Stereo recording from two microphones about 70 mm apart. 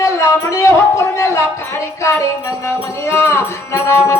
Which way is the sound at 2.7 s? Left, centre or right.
Left.